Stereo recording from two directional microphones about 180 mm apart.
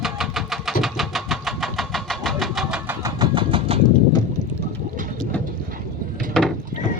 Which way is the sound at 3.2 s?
30° right (ahead or behind).